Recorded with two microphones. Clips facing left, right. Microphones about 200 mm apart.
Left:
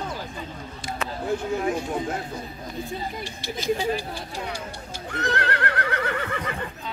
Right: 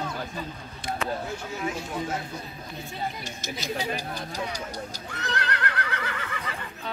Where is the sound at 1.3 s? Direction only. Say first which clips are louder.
Left 7 dB; 55° left (ahead or behind).